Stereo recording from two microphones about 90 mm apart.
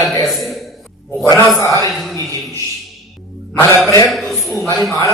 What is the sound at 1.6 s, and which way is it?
Speech, 35° left (ahead or behind).